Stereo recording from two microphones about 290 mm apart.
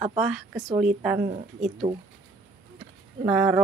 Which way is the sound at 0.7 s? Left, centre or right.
Right.